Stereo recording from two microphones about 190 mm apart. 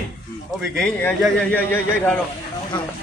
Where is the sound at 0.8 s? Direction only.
5° left (ahead or behind).